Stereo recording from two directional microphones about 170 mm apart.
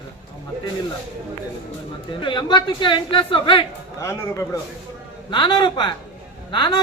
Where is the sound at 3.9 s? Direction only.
15° left (ahead or behind).